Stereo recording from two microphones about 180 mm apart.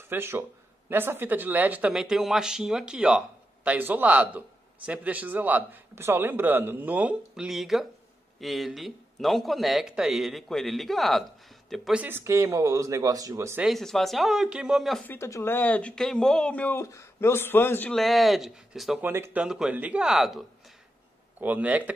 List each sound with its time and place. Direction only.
0.1 s speech: 10° right (ahead or behind)
13.7 s speech: centre (ahead or behind)
15.1 s speech: 15° left (ahead or behind); by 21.9 s 10° right (ahead or behind)